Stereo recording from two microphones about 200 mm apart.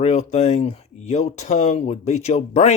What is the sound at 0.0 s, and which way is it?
Speech, 35° left (ahead or behind).